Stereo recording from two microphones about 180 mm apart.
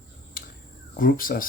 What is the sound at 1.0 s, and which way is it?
Speech, 50° left (ahead or behind).